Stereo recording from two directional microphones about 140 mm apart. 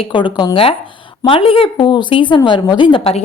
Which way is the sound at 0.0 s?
35° left (ahead or behind).